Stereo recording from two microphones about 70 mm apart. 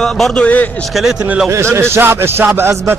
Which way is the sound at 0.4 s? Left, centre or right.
Centre.